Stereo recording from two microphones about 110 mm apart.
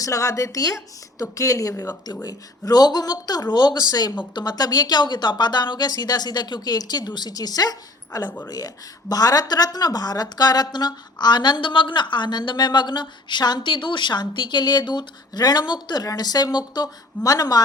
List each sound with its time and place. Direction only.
0.0 s a woman's voice: 30° left (ahead or behind)